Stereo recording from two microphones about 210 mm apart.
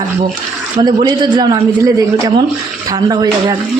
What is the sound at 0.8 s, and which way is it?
Speech, 20° right (ahead or behind).